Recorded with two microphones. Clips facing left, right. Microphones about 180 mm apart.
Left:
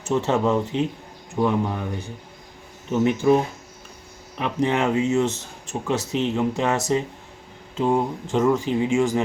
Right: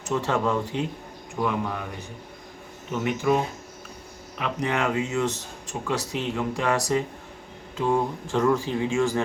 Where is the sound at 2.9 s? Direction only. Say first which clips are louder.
Left 5 dB; 30° left (ahead or behind).